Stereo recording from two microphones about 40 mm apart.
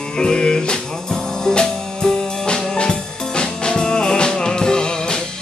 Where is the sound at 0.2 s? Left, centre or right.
Centre.